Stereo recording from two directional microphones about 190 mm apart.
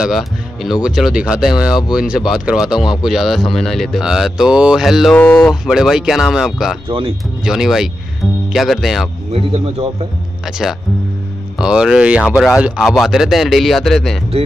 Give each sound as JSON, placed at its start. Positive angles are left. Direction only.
{"t": 0.0, "sound": "speech", "side_deg": 0}
{"t": 5.2, "sound": "a sound", "side_deg": 10}
{"t": 5.5, "sound": "speech", "side_deg": 0}
{"t": 6.9, "sound": "speech", "side_deg": -30}
{"t": 7.4, "sound": "speech", "side_deg": 0}
{"t": 9.3, "sound": "speech", "side_deg": -30}
{"t": 10.4, "sound": "speech", "side_deg": 0}